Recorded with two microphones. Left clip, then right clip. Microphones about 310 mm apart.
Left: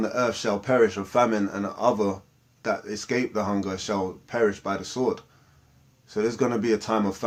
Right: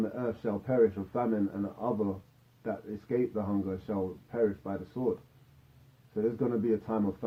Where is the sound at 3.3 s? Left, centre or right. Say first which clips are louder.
Left 7 dB; left.